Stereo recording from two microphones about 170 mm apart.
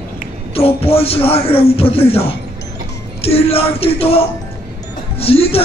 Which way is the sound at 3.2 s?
35° left (ahead or behind).